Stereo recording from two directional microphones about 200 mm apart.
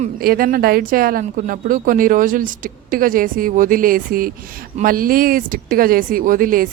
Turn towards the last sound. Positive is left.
turn(degrees=-45)  # may be behind; listen again after turning